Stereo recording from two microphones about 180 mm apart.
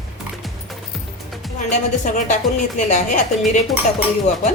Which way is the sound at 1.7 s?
40° left (ahead or behind).